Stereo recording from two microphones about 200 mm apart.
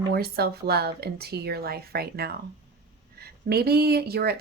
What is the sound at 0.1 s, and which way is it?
Speech, 50° right (ahead or behind).